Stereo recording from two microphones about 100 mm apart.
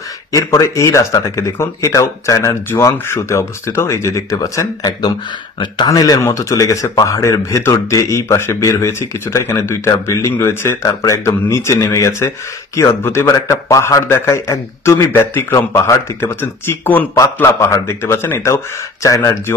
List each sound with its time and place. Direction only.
0.3 s a man's voice: 35° left (ahead or behind)